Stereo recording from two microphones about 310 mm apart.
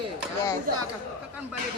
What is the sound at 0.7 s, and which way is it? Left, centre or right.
Speech, right.